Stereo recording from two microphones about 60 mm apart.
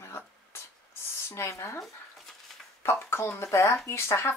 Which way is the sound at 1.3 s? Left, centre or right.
Left.